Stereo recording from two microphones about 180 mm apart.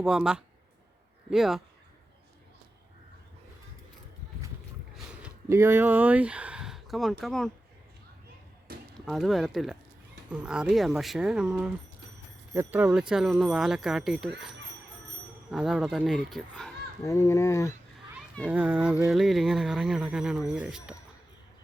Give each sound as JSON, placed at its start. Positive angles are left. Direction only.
{"t": 0.0, "sound": "speech", "side_deg": -5}
{"t": 5.5, "sound": "speech", "side_deg": -15}
{"t": 9.0, "sound": "speech", "side_deg": 0}
{"t": 17.0, "sound": "speech", "side_deg": 15}
{"t": 18.4, "sound": "speech", "side_deg": -5}